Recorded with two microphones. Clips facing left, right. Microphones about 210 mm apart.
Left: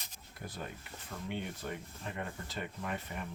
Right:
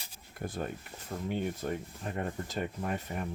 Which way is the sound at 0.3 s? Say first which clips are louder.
Right 7 dB; 50° right (ahead or behind).